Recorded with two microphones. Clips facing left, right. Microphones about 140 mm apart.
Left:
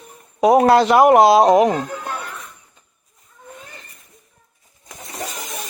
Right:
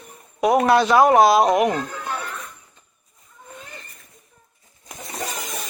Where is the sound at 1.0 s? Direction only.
20° left (ahead or behind).